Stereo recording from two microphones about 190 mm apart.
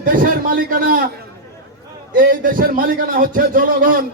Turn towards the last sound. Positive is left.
turn(degrees=-50)  # may be behind; listen again after turning